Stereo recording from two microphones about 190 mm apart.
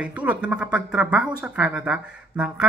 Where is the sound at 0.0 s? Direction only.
10° right (ahead or behind).